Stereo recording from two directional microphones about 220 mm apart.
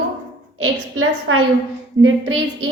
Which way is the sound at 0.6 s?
65° right (ahead or behind).